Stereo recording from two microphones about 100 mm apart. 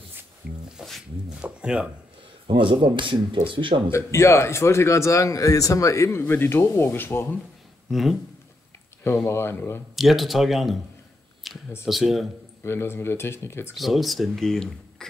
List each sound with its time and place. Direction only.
0.7 s speech: centre (ahead or behind)
1.4 s speech: 10° right (ahead or behind)
2.4 s speech: 60° right (ahead or behind)
3.9 s a man's voice: 30° left (ahead or behind)
7.9 s speech: centre (ahead or behind)
9.3 s a man's voice: 25° left (ahead or behind)
9.9 s speech: centre (ahead or behind)
12.6 s a man's voice: 25° left (ahead or behind)
13.7 s speech: centre (ahead or behind)